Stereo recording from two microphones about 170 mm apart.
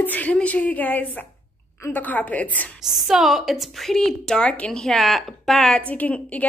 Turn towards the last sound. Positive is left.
turn(degrees=10)  # may be behind; listen again after turning